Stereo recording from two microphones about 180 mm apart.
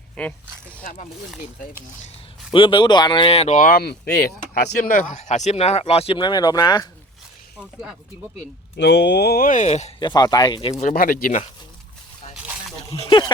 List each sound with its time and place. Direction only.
0.2 s speech: 5° left (ahead or behind)
0.8 s speech: 45° left (ahead or behind)
2.5 s speech: 25° left (ahead or behind)
8.7 s speech: 75° left (ahead or behind); by 9.9 s 40° left (ahead or behind)
10.0 s speech: 20° left (ahead or behind); by 11.4 s 50° left (ahead or behind)
12.3 s a sound: centre (ahead or behind)
13.1 s speech: 25° left (ahead or behind)